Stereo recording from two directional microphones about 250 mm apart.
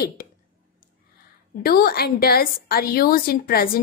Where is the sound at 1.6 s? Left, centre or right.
Left.